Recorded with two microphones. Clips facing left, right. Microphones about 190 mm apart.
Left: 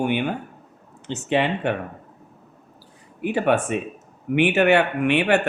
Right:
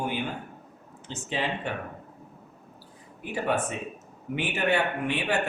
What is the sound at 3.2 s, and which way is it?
Speech, 75° left (ahead or behind).